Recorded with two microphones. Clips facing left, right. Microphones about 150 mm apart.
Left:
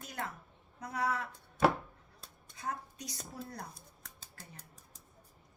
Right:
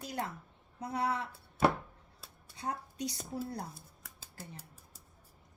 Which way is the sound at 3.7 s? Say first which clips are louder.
Right 1 dB; 5° right (ahead or behind).